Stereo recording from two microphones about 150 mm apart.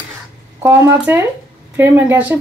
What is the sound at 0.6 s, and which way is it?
Speech, 15° right (ahead or behind).